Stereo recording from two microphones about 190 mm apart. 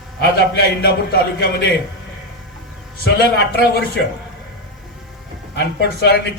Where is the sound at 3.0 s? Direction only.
55° left (ahead or behind).